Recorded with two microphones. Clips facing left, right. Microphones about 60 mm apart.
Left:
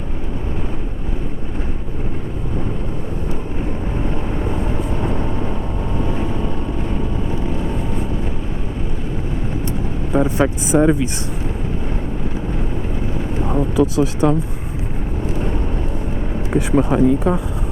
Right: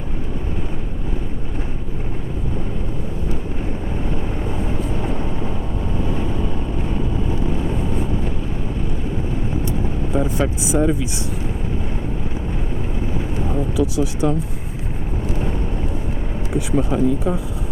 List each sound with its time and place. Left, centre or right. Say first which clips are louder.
4.4 s vehicle: left 2 dB; left
9.6 s vehicle: even; left
10.7 s speech: left 4 dB; left
13.4 s vehicle: left 4 dB; left
16.5 s speech: left 4 dB; left